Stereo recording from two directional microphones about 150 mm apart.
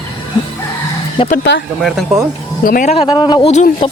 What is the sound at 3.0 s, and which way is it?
Speech, 30° left (ahead or behind).